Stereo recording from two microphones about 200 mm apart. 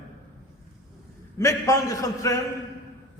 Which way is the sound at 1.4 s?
15° left (ahead or behind).